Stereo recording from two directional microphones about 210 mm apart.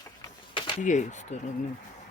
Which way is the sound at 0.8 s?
35° left (ahead or behind).